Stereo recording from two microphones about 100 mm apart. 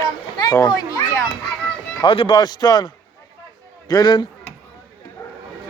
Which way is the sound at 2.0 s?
60° left (ahead or behind).